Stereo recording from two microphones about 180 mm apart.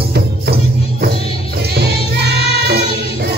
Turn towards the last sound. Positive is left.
turn(degrees=-65)  # may be behind; listen again after turning